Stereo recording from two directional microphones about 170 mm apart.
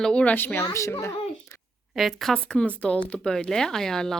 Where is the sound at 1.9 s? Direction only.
Centre (ahead or behind).